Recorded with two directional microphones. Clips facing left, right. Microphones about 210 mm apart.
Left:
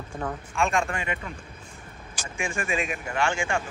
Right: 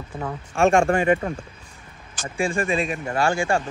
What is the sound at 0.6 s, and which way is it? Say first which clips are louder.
Speech: right 9 dB; 50° right (ahead or behind).